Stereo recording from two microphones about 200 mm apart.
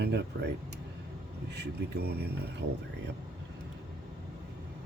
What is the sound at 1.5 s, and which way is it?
Speech, 55° right (ahead or behind).